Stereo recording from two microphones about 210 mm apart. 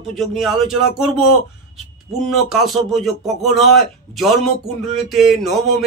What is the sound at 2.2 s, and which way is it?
Speech, centre (ahead or behind).